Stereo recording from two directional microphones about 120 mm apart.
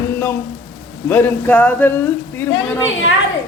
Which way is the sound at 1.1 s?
15° left (ahead or behind).